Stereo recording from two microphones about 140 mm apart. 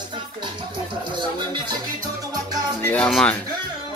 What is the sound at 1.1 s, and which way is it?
Speech, 35° right (ahead or behind).